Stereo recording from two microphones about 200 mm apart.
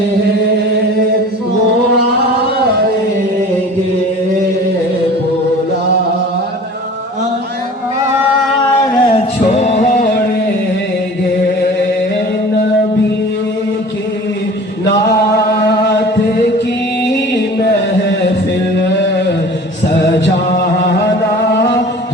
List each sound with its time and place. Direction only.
8.9 s music: 30° left (ahead or behind)